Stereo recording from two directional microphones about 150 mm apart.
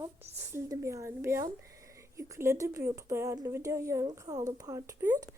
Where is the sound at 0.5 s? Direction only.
20° right (ahead or behind).